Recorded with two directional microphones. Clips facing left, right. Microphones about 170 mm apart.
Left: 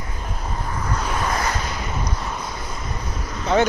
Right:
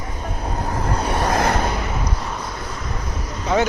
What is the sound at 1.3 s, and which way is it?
Waves, 55° right (ahead or behind).